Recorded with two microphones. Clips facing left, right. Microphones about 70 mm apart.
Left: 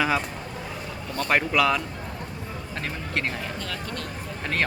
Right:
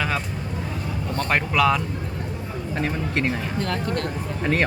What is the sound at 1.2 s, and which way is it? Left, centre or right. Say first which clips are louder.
Speech: right 1 dB; centre.